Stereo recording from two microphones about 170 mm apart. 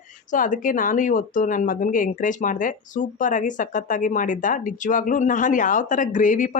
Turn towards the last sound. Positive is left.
turn(degrees=50)  # may be behind; listen again after turning